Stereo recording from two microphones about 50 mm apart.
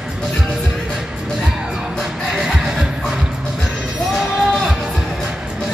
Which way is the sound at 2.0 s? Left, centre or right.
Centre.